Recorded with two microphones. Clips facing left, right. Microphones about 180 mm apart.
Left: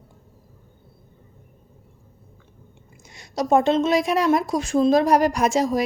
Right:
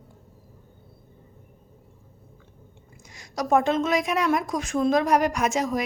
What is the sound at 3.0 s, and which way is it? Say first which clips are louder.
A woman's voice: left 4 dB; 25° left (ahead or behind).